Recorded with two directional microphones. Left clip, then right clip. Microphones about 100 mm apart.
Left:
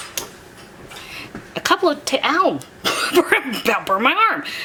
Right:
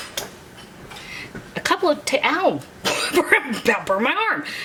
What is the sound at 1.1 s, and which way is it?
Speech, 15° left (ahead or behind).